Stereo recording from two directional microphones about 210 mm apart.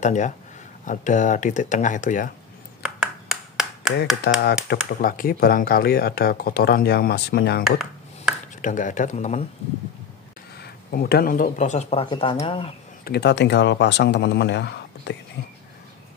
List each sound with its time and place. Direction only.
0.0 s speech: 35° left (ahead or behind)
3.0 s a sound: centre (ahead or behind)
4.2 s speech: 50° left (ahead or behind)
8.5 s speech: 35° left (ahead or behind)
10.6 s speech: 45° left (ahead or behind); by 12.7 s 25° left (ahead or behind)
13.0 s speech: 50° left (ahead or behind)